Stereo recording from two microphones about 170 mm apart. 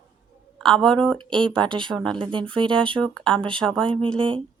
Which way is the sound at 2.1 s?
30° right (ahead or behind).